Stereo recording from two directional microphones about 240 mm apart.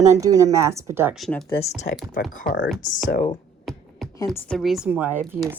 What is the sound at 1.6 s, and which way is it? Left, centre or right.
A woman's voice, left.